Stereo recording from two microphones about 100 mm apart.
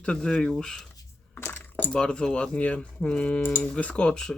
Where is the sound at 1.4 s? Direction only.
25° left (ahead or behind).